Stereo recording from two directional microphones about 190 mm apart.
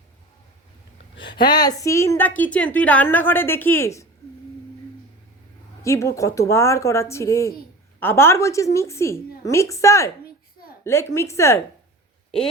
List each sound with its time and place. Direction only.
1.2 s a woman's voice: 25° left (ahead or behind)
5.8 s a woman's voice: 15° left (ahead or behind)